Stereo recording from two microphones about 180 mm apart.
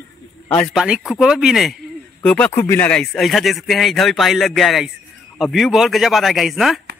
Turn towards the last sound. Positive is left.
turn(degrees=0)  # may be behind; listen again after turning